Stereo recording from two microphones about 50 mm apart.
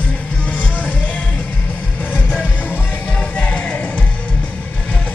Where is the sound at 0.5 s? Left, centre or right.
Left.